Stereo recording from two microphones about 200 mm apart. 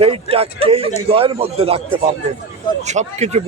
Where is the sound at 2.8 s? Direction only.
35° right (ahead or behind).